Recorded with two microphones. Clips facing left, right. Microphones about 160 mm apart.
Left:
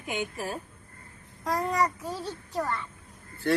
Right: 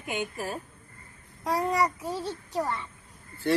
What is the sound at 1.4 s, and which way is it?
A child's voice, 10° right (ahead or behind).